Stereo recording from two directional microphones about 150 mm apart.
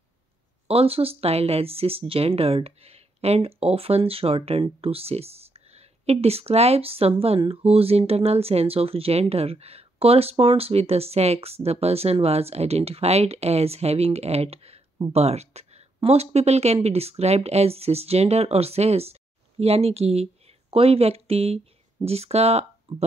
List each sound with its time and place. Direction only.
0.7 s a woman's voice: 40° right (ahead or behind)